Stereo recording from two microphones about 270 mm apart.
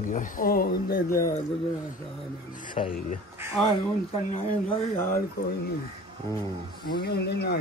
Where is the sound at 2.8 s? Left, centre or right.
Left.